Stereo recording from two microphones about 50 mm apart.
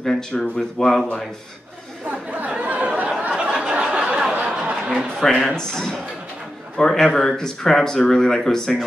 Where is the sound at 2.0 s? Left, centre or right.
Right.